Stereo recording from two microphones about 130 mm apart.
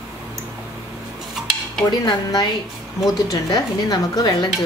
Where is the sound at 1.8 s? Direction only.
35° left (ahead or behind).